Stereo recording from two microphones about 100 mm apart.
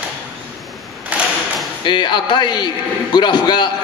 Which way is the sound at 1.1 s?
15° right (ahead or behind).